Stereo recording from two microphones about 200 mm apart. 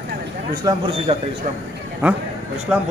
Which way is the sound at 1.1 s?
30° right (ahead or behind).